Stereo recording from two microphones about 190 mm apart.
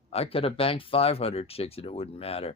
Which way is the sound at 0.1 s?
30° left (ahead or behind).